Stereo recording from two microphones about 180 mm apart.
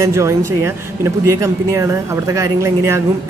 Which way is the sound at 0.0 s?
15° right (ahead or behind).